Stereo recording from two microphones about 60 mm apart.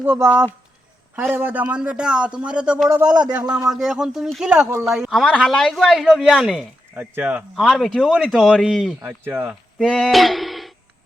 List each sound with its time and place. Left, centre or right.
0.0 s a man's voice: right
1.7 s speech: centre
3.7 s a woman's voice: centre
5.5 s a woman's voice: centre
6.9 s a man's voice: right
7.5 s a woman's voice: centre
8.4 s a woman's voice: centre
9.0 s a man's voice: right
9.7 s speech: centre
10.1 s a sound: centre